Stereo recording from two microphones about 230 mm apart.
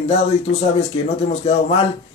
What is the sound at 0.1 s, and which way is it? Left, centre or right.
Speech, left.